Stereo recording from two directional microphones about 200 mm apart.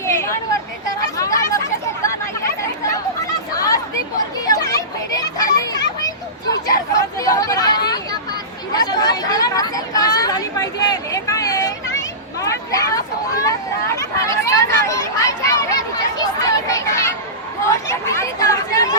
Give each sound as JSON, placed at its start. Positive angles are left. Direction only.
{"t": 0.9, "sound": "chatter", "side_deg": 15}
{"t": 4.4, "sound": "children playing", "side_deg": 15}
{"t": 6.7, "sound": "hubbub", "side_deg": 15}
{"t": 7.9, "sound": "chatter", "side_deg": 20}